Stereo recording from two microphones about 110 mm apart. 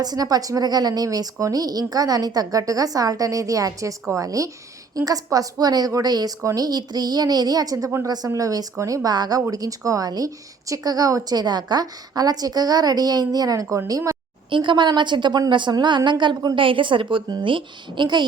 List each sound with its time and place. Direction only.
0.0 s a woman's voice: 35° right (ahead or behind)
14.5 s a woman's voice: 45° right (ahead or behind)
16.6 s a woman's voice: 50° right (ahead or behind)